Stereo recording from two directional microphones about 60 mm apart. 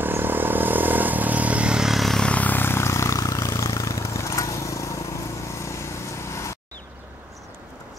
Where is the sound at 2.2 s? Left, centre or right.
Left.